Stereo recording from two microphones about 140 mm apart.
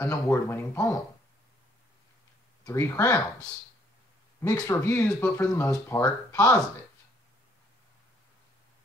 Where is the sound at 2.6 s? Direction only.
20° left (ahead or behind).